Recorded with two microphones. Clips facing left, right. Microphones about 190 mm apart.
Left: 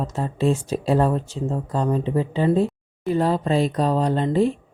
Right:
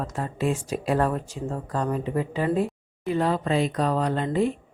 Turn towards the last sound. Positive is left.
turn(degrees=30)  # may be behind; listen again after turning